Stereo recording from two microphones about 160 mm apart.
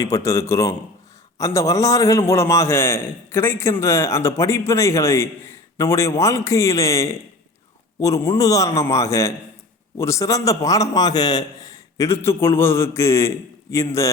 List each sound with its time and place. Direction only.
0.0 s a man's voice: 20° left (ahead or behind)